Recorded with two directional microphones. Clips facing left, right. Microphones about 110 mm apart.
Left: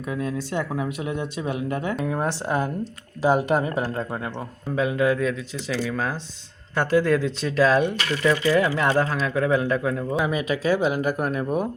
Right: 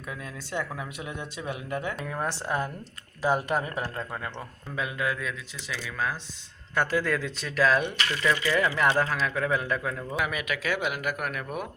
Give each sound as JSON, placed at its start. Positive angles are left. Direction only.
{"t": 0.1, "sound": "a man's voice", "side_deg": 25}